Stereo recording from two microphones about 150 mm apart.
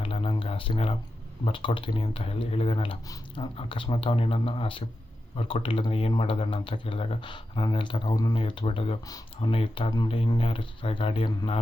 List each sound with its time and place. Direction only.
0.0 s a sound: 35° left (ahead or behind)
1.5 s speech: 35° left (ahead or behind)
9.0 s speech: 25° left (ahead or behind)
9.5 s speech: 40° left (ahead or behind)